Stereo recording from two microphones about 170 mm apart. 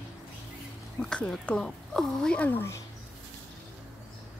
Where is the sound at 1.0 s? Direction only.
5° left (ahead or behind).